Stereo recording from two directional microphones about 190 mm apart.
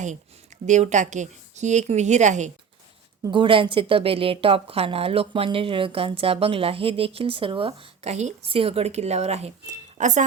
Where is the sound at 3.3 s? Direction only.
25° right (ahead or behind).